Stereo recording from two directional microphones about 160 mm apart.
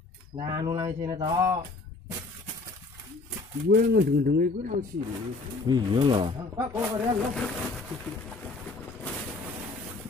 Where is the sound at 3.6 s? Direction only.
80° right; by 4.7 s 60° right (ahead or behind).